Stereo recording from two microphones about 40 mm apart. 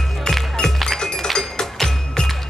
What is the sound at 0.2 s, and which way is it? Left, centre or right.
Music, centre.